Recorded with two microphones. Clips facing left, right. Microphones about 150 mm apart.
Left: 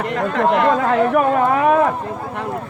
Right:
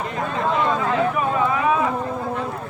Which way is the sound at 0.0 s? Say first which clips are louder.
Left 6 dB; 70° left (ahead or behind).